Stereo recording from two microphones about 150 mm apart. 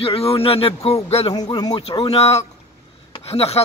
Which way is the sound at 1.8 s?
40° left (ahead or behind).